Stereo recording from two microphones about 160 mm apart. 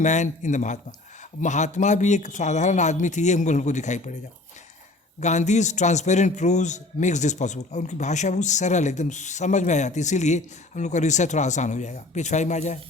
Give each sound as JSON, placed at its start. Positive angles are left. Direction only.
{"t": 0.0, "sound": "a man's voice", "side_deg": 50}
{"t": 5.2, "sound": "a man's voice", "side_deg": 45}